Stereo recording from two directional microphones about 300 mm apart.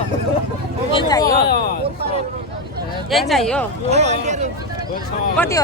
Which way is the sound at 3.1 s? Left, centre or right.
Centre.